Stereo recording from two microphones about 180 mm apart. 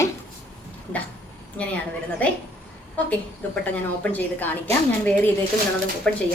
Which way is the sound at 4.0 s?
10° left (ahead or behind).